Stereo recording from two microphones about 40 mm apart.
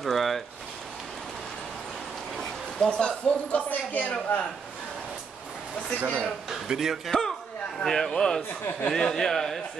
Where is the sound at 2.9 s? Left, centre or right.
Centre.